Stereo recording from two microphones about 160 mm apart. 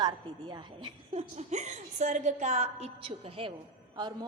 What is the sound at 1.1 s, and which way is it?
A woman's voice, 45° right (ahead or behind).